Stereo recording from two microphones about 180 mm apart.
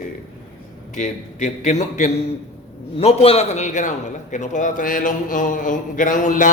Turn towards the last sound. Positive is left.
turn(degrees=45)  # may be behind; listen again after turning